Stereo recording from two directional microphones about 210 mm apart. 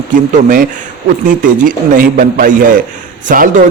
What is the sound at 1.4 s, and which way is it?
A man's voice, 40° right (ahead or behind).